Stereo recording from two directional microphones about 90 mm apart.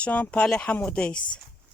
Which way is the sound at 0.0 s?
15° left (ahead or behind).